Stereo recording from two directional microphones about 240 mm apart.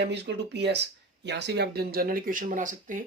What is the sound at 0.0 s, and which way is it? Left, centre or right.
Speech, right.